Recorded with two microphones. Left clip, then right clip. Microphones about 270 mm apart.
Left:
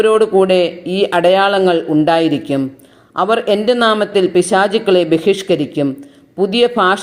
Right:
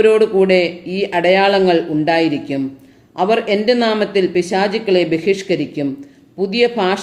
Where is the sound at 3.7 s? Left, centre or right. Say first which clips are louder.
Left 3 dB; left.